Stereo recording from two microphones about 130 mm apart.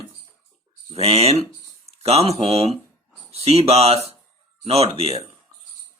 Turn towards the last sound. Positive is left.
turn(degrees=-50)  # may be behind; listen again after turning